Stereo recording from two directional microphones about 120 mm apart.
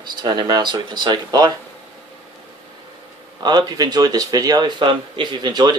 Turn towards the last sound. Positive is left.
turn(degrees=-35)  # may be behind; listen again after turning